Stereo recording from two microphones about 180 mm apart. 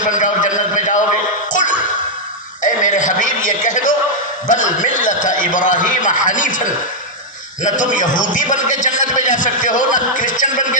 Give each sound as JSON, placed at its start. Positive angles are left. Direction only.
{"t": 0.1, "sound": "a sound", "side_deg": 45}
{"t": 2.6, "sound": "a man's voice", "side_deg": 45}
{"t": 7.6, "sound": "a man's voice", "side_deg": 45}